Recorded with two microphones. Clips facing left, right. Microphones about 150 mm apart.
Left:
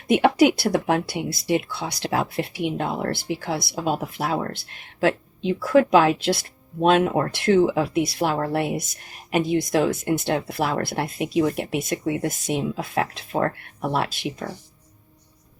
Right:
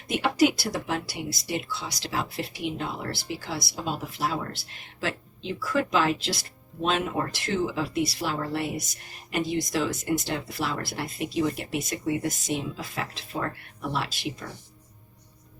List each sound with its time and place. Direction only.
0.1 s speech: 55° left (ahead or behind)